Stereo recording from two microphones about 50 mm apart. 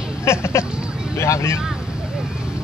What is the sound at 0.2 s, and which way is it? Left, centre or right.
Speech, left.